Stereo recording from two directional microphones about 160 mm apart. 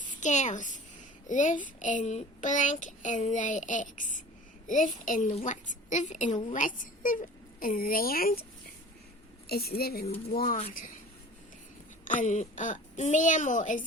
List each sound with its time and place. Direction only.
0.2 s child singing: 50° left (ahead or behind)
5.9 s a woman's voice: 50° left (ahead or behind); by 8.4 s 65° left (ahead or behind)
9.5 s a woman's voice: 75° left (ahead or behind)
12.2 s child singing: 50° left (ahead or behind)